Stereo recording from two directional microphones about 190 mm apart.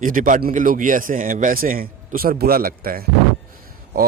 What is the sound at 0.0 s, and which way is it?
Speech, 45° right (ahead or behind).